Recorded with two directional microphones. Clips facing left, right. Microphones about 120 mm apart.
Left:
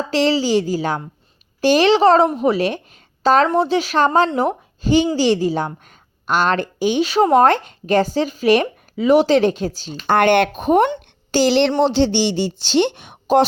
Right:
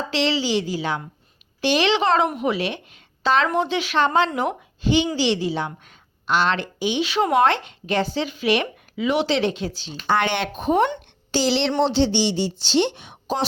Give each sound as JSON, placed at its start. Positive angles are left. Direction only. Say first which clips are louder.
{"t": 0.1, "sound": "a woman's voice", "louder": "left 6 dB", "side_deg": 40}